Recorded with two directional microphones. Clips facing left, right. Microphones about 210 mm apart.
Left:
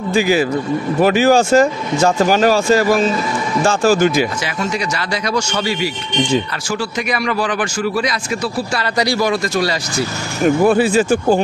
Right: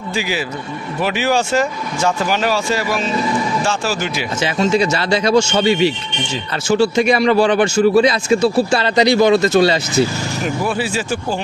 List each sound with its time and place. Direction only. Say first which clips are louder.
0.1 s speech: left 8 dB; 50° left (ahead or behind)
4.6 s speech: right 7 dB; 25° right (ahead or behind)
10.4 s speech: left 9 dB; 50° left (ahead or behind)